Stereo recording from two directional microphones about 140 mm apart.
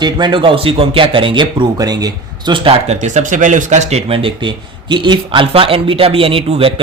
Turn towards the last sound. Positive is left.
turn(degrees=-40)  # may be behind; listen again after turning